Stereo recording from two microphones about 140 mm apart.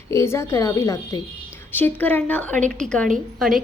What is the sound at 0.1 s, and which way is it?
A woman's voice, 20° left (ahead or behind).